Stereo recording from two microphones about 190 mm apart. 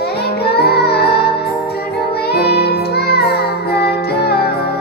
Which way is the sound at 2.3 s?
60° left (ahead or behind).